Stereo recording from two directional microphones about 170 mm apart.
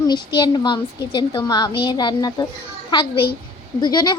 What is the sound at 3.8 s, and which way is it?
Speech, 25° left (ahead or behind).